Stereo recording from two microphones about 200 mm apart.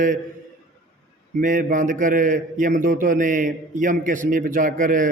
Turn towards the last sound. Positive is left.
turn(degrees=-40)  # may be behind; listen again after turning